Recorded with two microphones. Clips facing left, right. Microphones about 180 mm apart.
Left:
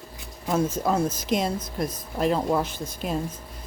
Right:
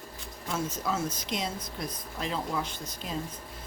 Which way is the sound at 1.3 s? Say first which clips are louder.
Left 8 dB; 50° left (ahead or behind).